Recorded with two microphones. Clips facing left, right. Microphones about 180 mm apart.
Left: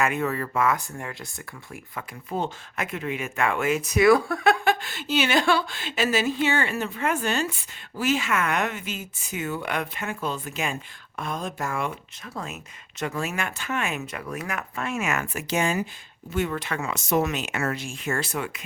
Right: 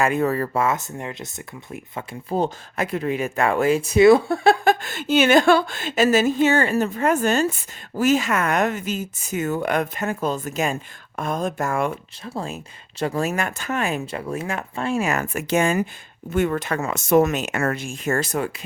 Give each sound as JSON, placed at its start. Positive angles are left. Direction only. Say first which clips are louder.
{"t": 0.0, "sound": "speech", "louder": "right 5 dB", "side_deg": -35}
{"t": 2.3, "sound": "speech", "louder": "right 6 dB", "side_deg": -35}
{"t": 4.6, "sound": "a woman's voice", "louder": "right 5 dB", "side_deg": -45}
{"t": 12.2, "sound": "speech", "louder": "right 5 dB", "side_deg": -30}
{"t": 15.3, "sound": "a woman's voice", "louder": "right 5 dB", "side_deg": -50}